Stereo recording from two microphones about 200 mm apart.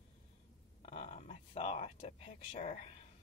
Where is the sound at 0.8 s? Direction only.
35° left (ahead or behind).